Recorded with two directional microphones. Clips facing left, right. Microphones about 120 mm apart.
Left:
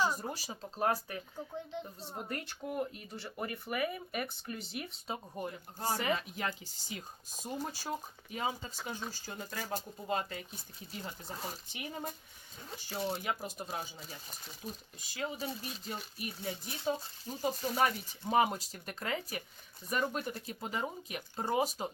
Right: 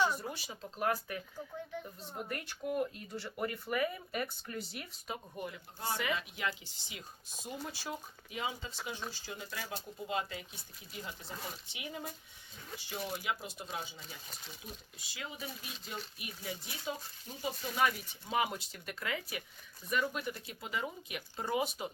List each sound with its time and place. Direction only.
0.0 s speech: 40° left (ahead or behind)